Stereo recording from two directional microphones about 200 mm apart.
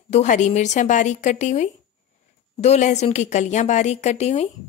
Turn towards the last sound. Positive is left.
turn(degrees=35)  # may be behind; listen again after turning